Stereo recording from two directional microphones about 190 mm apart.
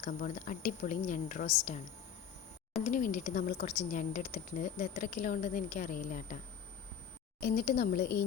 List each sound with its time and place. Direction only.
0.0 s speech: 45° left (ahead or behind)
2.8 s speech: 45° left (ahead or behind)